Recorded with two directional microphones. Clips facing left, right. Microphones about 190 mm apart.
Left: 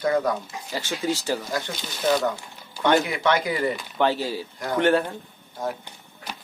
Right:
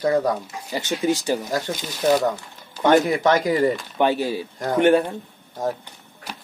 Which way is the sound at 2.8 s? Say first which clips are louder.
Right 4 dB; 45° right (ahead or behind).